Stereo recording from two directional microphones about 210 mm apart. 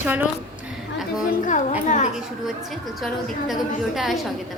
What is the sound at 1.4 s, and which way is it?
Speech, 35° left (ahead or behind).